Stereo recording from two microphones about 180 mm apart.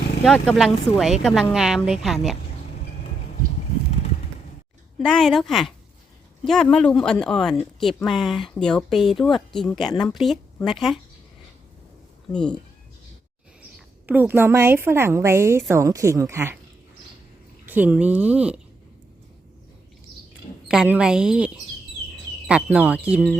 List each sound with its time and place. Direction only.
0.4 s speech: centre (ahead or behind)
4.9 s speech: centre (ahead or behind)
12.3 s speech: 5° left (ahead or behind)
13.6 s a woman's voice: 10° right (ahead or behind)
17.7 s speech: 10° right (ahead or behind)
20.7 s speech: 5° right (ahead or behind)